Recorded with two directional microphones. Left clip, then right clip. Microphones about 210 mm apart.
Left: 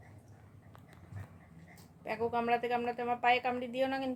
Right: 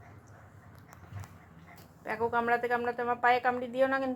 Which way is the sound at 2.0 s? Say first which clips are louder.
Right 4 dB; centre (ahead or behind).